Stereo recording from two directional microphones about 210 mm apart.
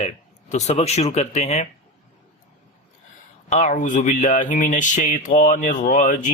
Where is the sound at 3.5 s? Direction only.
35° left (ahead or behind).